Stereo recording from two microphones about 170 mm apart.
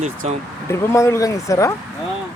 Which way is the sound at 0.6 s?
15° left (ahead or behind).